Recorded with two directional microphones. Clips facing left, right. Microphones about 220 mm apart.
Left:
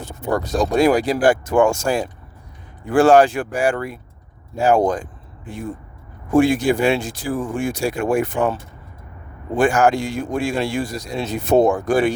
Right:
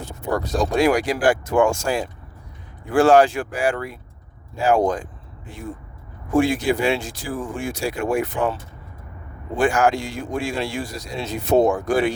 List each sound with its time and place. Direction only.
0.8 s speech: 35° left (ahead or behind)
6.3 s speech: 55° left (ahead or behind)
9.6 s speech: 50° left (ahead or behind)